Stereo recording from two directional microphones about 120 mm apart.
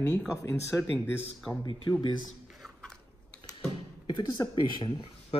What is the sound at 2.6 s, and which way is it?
Chewing, 5° left (ahead or behind).